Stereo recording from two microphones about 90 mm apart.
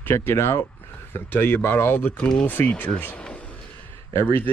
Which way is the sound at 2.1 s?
10° left (ahead or behind).